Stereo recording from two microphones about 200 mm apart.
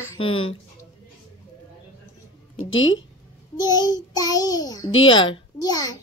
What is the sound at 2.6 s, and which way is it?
Speech, 75° left (ahead or behind).